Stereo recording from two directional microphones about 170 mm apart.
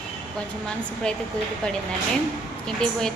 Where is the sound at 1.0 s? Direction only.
5° left (ahead or behind).